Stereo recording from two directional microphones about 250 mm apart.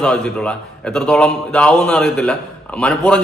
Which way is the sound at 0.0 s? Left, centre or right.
Centre.